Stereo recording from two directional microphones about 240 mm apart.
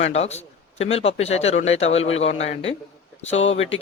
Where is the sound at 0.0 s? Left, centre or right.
Left.